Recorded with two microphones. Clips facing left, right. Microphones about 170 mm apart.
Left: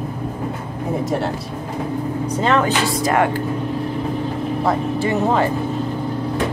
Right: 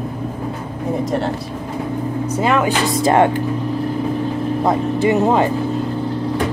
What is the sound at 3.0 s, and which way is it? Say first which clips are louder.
Speech: right 5 dB; 25° right (ahead or behind).